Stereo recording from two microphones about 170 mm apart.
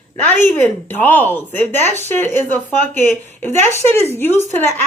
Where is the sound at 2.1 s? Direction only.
10° left (ahead or behind).